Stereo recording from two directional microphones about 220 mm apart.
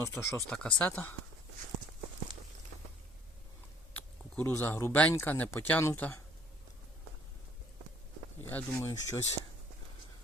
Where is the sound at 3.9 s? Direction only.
10° left (ahead or behind).